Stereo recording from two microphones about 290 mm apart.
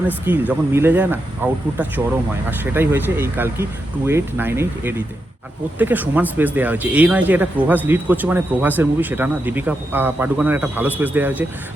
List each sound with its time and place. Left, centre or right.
0.3 s speech: centre